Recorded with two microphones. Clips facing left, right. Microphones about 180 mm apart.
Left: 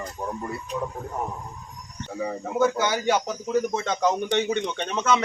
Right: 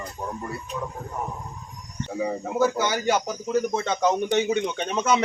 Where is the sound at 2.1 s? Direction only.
10° right (ahead or behind).